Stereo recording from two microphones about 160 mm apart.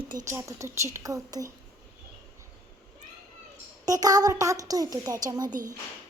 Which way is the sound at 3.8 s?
20° right (ahead or behind).